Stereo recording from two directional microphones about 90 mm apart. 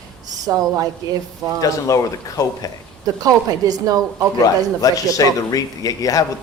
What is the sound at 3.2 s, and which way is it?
A woman's voice, 45° right (ahead or behind).